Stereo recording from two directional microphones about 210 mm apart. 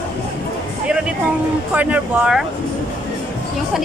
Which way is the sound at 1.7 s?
5° right (ahead or behind).